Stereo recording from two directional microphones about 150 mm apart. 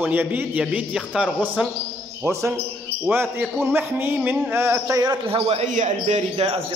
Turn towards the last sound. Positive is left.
turn(degrees=-55)  # may be behind; listen again after turning